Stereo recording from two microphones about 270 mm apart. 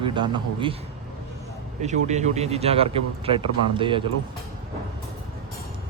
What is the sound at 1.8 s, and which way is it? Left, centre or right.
Speech, right.